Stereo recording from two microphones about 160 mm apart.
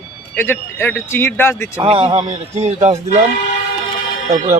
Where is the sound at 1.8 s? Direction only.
35° right (ahead or behind).